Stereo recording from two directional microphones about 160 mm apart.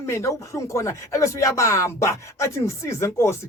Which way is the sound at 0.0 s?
15° left (ahead or behind).